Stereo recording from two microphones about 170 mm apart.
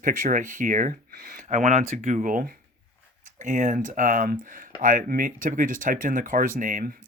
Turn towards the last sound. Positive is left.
turn(degrees=-50)  # may be behind; listen again after turning